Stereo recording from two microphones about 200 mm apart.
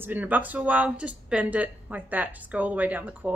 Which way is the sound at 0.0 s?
10° right (ahead or behind).